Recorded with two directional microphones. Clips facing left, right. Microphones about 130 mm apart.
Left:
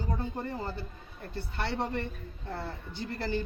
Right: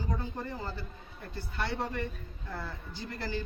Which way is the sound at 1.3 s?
65° left (ahead or behind).